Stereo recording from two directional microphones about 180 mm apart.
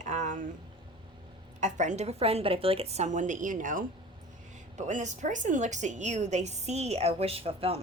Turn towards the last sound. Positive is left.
turn(degrees=-35)  # may be behind; listen again after turning